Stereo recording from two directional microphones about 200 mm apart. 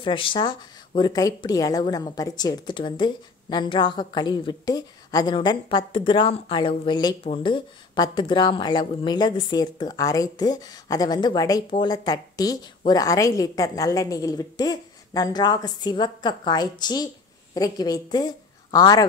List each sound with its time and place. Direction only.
0.0 s a woman's voice: 25° left (ahead or behind)